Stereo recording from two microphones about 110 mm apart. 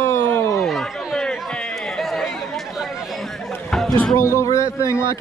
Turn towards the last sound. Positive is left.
turn(degrees=25)  # may be behind; listen again after turning